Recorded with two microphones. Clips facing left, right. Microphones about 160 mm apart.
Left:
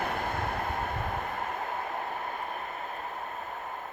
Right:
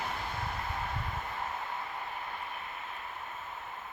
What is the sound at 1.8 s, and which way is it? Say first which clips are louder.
Vehicle: left 6 dB; 50° left (ahead or behind).